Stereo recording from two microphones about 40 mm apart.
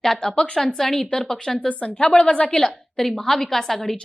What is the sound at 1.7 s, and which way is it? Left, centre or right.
Speech, left.